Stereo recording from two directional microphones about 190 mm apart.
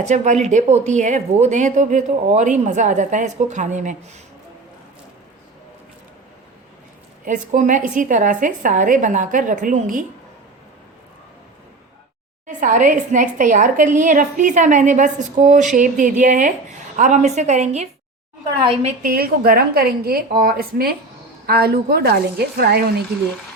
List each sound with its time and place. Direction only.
0.0 s a woman's voice: 40° right (ahead or behind)
7.3 s a woman's voice: 40° right (ahead or behind)
12.5 s a woman's voice: 45° right (ahead or behind)
19.0 s a woman's voice: 50° right (ahead or behind)